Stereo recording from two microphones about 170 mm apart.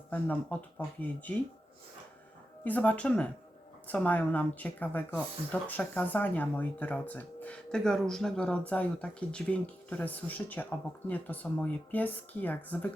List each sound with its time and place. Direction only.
0.1 s speech: 10° left (ahead or behind)
2.6 s speech: 10° left (ahead or behind)